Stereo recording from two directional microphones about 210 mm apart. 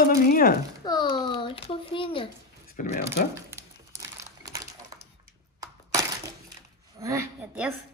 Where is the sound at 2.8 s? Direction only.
50° left (ahead or behind).